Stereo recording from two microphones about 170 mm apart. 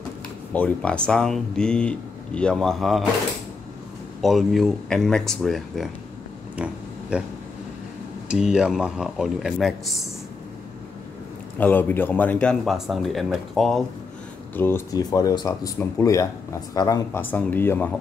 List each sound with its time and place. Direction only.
0.5 s speech: 5° left (ahead or behind)
4.2 s speech: centre (ahead or behind)
6.5 s a sound: 5° right (ahead or behind)
8.3 s speech: 5° right (ahead or behind)
11.5 s speech: 10° left (ahead or behind)
14.5 s speech: 15° left (ahead or behind)